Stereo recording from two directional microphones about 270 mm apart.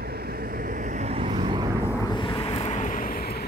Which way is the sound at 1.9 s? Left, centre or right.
Centre.